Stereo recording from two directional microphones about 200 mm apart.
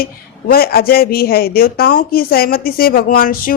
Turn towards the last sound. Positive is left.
turn(degrees=45)  # may be behind; listen again after turning